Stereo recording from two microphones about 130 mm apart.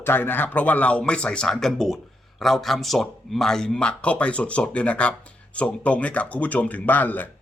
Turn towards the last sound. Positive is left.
turn(degrees=15)  # may be behind; listen again after turning